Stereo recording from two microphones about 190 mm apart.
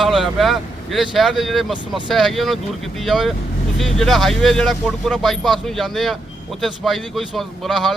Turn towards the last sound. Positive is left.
turn(degrees=0)  # may be behind; listen again after turning